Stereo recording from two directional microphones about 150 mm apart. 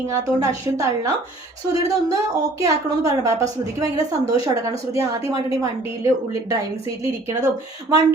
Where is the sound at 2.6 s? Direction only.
20° right (ahead or behind).